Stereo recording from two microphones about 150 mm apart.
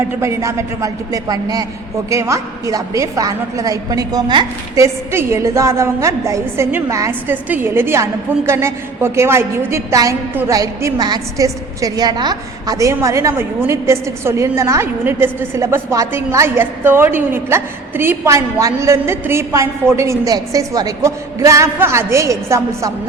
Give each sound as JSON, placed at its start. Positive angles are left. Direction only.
{"t": 0.2, "sound": "a woman's voice", "side_deg": -20}